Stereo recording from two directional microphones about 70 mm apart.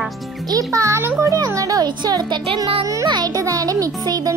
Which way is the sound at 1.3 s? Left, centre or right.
Right.